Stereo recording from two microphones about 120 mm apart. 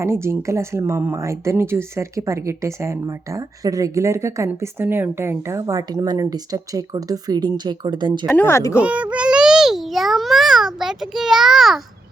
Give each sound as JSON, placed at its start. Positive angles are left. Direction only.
{"t": 0.0, "sound": "speech", "side_deg": -20}
{"t": 8.4, "sound": "a child's voice", "side_deg": 20}
{"t": 8.7, "sound": "a child's voice", "side_deg": -10}